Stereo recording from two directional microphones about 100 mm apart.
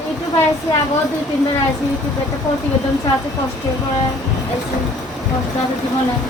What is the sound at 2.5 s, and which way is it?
Speech, 35° left (ahead or behind).